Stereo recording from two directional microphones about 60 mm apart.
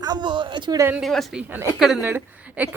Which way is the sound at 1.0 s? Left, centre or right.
Centre.